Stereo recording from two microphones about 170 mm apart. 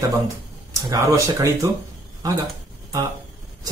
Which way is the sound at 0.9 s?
20° right (ahead or behind).